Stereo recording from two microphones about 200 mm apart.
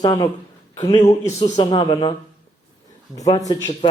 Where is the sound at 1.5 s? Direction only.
20° left (ahead or behind).